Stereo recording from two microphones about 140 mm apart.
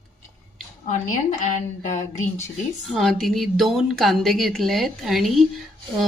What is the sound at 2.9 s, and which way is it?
A woman's voice, centre (ahead or behind).